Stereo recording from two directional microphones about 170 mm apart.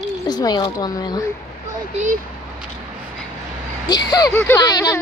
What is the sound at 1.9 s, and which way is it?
Speech, 45° right (ahead or behind).